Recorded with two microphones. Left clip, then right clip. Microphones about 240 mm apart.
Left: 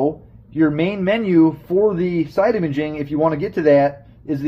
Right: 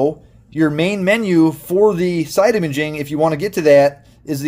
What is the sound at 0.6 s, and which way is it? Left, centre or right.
Speech, right.